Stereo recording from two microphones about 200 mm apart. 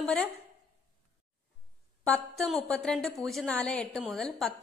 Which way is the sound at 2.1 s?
Centre (ahead or behind).